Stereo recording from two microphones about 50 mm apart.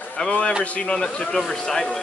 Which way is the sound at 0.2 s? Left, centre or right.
Left.